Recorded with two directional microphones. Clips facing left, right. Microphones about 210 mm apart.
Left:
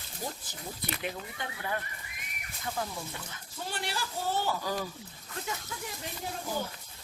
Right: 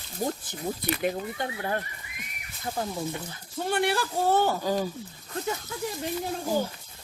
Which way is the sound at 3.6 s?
60° right (ahead or behind).